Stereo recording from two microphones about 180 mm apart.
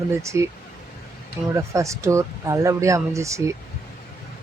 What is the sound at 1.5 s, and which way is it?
Speech, 15° right (ahead or behind).